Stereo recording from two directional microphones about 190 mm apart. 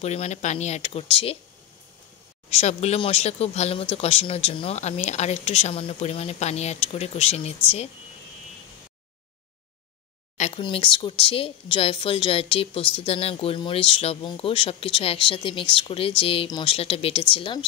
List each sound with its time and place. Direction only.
0.0 s speech: 35° left (ahead or behind)
2.5 s speech: 35° left (ahead or behind)
10.3 s a sound: 40° left (ahead or behind)
10.6 s speech: 25° left (ahead or behind)